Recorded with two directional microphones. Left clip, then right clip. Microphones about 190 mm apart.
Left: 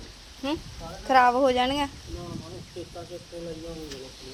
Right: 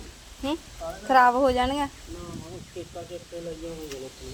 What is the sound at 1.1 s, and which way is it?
Speech, 5° left (ahead or behind).